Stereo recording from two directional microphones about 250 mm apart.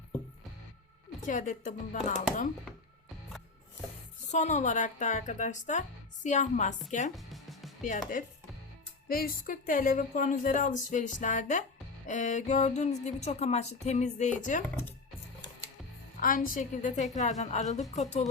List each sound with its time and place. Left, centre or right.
1.3 s speech: left
4.3 s speech: left
7.2 s music: centre
7.8 s speech: left
16.2 s speech: left